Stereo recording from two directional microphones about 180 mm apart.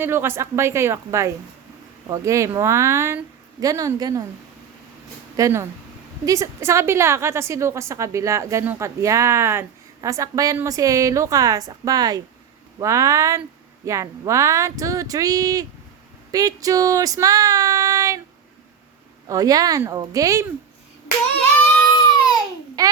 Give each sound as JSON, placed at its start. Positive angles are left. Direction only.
{"t": 0.0, "sound": "a woman's voice", "side_deg": -15}
{"t": 5.4, "sound": "a woman's voice", "side_deg": -15}
{"t": 16.3, "sound": "female singing", "side_deg": -20}
{"t": 19.3, "sound": "speech", "side_deg": -20}
{"t": 21.9, "sound": "baby cry", "side_deg": 20}
{"t": 22.8, "sound": "a child's voice", "side_deg": -20}